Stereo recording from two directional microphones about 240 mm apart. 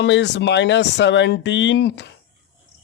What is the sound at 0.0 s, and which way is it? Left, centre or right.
Speech, left.